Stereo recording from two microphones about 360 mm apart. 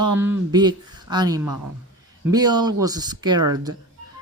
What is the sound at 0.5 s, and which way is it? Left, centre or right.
Speech, centre.